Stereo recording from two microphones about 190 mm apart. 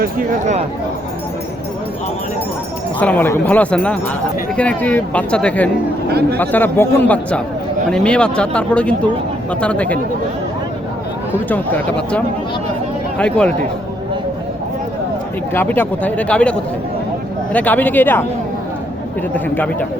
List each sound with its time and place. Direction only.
0.0 s speech: 40° right (ahead or behind)
3.0 s speech: 10° left (ahead or behind)
11.4 s speech: 10° left (ahead or behind)
15.5 s speech: 10° left (ahead or behind)
19.5 s speech: 10° left (ahead or behind)